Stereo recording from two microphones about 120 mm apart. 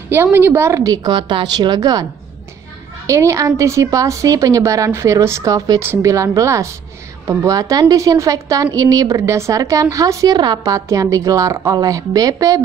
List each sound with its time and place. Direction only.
0.1 s a woman's voice: 20° right (ahead or behind)
3.1 s a woman's voice: 25° right (ahead or behind)